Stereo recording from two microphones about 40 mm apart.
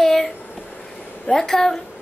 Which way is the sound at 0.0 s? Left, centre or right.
Centre.